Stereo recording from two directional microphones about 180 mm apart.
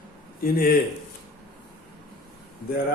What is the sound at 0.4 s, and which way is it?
Speech, 55° left (ahead or behind).